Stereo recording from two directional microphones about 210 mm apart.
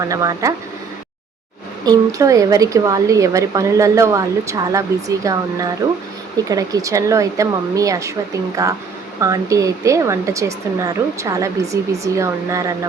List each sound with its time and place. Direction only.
0.0 s speech: 15° right (ahead or behind)
1.8 s speech: 15° right (ahead or behind)